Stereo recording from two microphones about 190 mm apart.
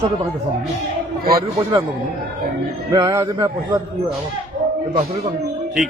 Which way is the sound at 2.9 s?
20° right (ahead or behind).